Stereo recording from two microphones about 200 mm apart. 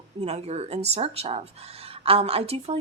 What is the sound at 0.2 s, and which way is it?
A woman's voice, 30° right (ahead or behind).